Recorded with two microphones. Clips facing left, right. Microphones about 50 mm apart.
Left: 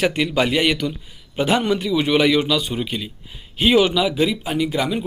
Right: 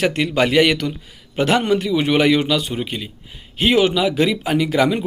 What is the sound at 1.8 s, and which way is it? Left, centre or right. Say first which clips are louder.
Speech: right 1 dB; right.